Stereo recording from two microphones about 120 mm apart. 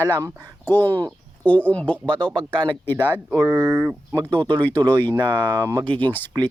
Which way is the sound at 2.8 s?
15° left (ahead or behind).